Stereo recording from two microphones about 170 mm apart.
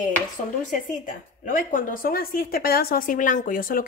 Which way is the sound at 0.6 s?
50° left (ahead or behind).